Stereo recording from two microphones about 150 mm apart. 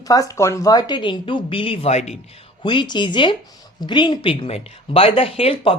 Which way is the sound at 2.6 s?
30° left (ahead or behind).